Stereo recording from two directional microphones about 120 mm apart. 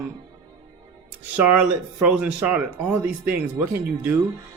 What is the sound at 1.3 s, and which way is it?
Speech, 15° right (ahead or behind).